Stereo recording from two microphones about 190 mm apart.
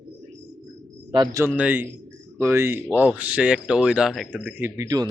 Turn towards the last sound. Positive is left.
turn(degrees=-20)  # may be behind; listen again after turning